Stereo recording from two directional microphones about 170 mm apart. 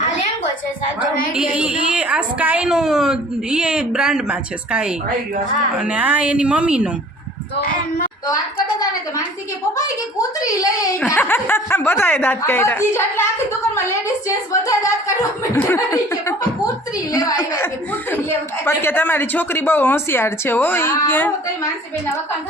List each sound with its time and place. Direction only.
1.4 s a woman's voice: 5° right (ahead or behind)
10.4 s a woman's voice: 20° left (ahead or behind)
14.3 s a woman's voice: 20° left (ahead or behind)
18.6 s a woman's voice: 15° left (ahead or behind)